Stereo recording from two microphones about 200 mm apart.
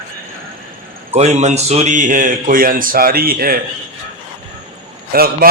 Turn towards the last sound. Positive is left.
turn(degrees=-50)  # may be behind; listen again after turning